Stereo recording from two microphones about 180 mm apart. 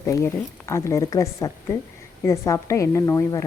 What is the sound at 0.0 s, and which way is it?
Speech, 15° left (ahead or behind).